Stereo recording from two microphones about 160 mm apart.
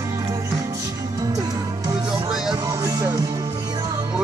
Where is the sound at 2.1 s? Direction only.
5° right (ahead or behind).